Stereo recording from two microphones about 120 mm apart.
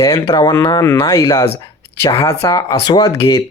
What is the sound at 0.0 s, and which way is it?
Speech, 35° left (ahead or behind).